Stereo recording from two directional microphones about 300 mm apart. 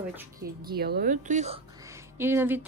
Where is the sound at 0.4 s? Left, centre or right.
Right.